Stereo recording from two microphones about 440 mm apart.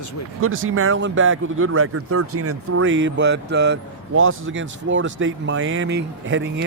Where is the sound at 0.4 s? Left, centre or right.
Right.